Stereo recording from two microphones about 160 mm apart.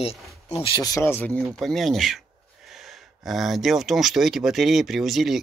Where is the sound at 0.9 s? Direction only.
15° left (ahead or behind).